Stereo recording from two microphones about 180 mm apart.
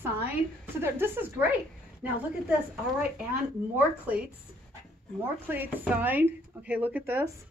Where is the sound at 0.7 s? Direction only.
10° right (ahead or behind).